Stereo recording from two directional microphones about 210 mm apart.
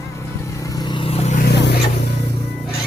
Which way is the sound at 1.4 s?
50° left (ahead or behind).